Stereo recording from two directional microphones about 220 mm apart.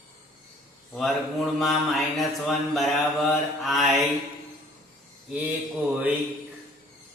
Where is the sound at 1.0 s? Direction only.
Centre (ahead or behind).